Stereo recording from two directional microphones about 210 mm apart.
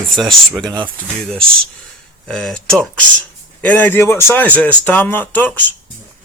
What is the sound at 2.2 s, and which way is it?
Speech, 5° left (ahead or behind).